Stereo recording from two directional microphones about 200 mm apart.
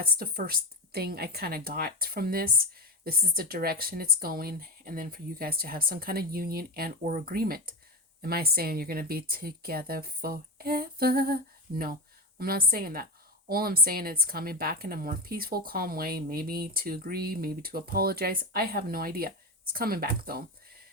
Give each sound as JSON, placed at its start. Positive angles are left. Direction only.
{"t": 0.2, "sound": "speech", "side_deg": -50}